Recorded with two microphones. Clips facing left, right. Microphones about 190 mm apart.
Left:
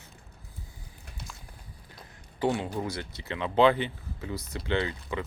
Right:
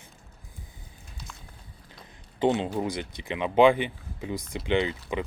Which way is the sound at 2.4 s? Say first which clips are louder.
Right 4 dB; 20° right (ahead or behind).